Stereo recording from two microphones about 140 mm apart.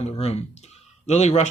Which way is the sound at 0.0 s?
50° left (ahead or behind).